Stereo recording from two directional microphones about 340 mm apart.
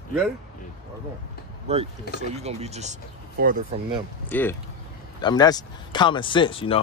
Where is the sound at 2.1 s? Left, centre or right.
Left.